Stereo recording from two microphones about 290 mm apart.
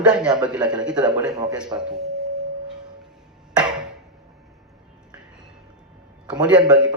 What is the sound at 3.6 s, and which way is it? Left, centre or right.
Chop, centre.